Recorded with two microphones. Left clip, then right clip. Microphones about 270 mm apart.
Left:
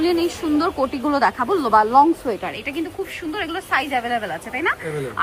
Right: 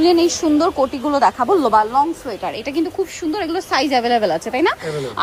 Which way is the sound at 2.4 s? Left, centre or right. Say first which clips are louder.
Right 5 dB; centre.